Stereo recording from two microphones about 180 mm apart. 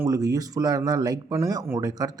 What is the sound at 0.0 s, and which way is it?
Speech, 20° right (ahead or behind).